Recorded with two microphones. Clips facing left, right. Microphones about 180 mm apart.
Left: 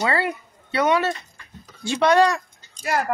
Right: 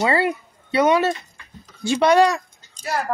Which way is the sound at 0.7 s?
15° right (ahead or behind).